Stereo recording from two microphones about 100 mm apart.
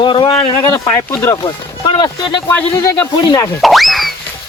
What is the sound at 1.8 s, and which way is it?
Speech, 45° left (ahead or behind).